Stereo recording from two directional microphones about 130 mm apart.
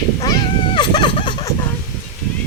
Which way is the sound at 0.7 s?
35° left (ahead or behind).